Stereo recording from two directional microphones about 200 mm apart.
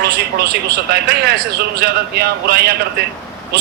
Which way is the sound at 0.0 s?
50° right (ahead or behind).